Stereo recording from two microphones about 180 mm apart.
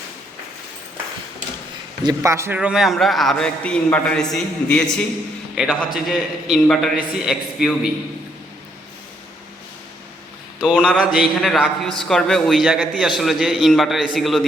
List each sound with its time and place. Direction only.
2.0 s a man's voice: 15° right (ahead or behind)
2.6 s a man's voice: 5° right (ahead or behind)
10.6 s a man's voice: 5° left (ahead or behind)